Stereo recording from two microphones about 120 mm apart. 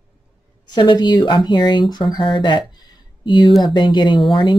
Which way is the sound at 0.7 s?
35° left (ahead or behind).